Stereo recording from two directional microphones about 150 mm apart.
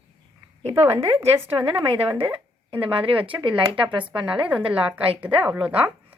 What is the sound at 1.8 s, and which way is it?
Speech, 35° right (ahead or behind).